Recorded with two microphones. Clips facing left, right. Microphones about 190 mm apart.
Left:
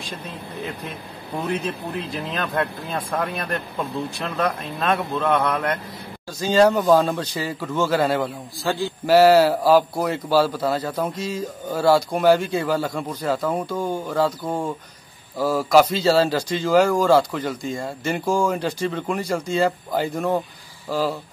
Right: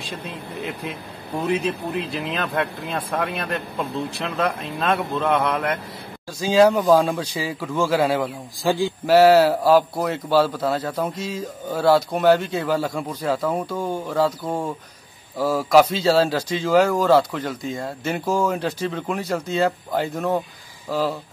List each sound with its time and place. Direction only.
1.4 s speech: 10° right (ahead or behind)
8.6 s speech: 15° right (ahead or behind)
9.0 s speech: centre (ahead or behind)
13.7 s speech: 5° left (ahead or behind)
14.1 s speech: 5° right (ahead or behind)